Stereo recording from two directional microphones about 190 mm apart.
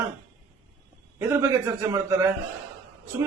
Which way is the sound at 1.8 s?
15° right (ahead or behind).